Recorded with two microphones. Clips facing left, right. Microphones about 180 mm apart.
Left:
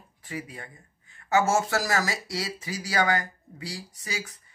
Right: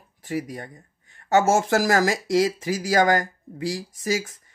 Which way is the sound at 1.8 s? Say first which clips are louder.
Right 7 dB; 50° right (ahead or behind).